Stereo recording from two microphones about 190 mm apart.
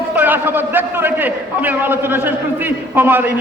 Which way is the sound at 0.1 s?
10° right (ahead or behind).